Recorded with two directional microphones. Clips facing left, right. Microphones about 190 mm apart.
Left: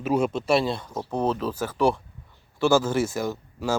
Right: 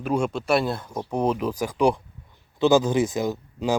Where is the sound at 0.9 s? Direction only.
15° right (ahead or behind).